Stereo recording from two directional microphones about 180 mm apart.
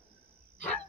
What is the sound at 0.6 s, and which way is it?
Dog, 10° left (ahead or behind).